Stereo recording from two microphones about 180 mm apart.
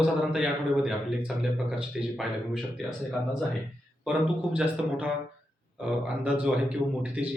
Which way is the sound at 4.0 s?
5° right (ahead or behind).